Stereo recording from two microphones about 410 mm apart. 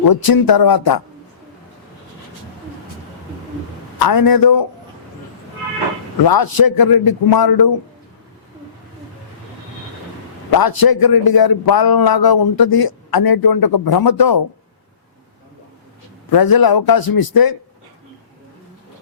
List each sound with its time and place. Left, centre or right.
0.1 s a man's voice: left
3.9 s a man's voice: left
6.2 s a man's voice: left
10.5 s a man's voice: left
16.3 s a man's voice: left